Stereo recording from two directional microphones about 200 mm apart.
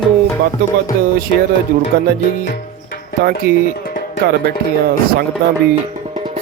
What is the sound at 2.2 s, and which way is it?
Music, 40° left (ahead or behind).